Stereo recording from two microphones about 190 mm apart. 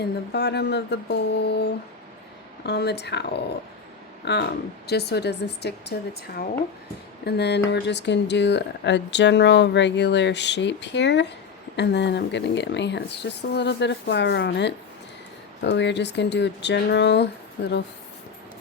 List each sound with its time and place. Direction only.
0.0 s a woman's voice: 60° left (ahead or behind)